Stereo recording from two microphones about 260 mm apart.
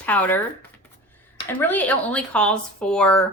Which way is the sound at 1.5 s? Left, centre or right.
Centre.